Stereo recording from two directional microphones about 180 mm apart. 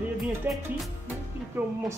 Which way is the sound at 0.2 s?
Centre (ahead or behind).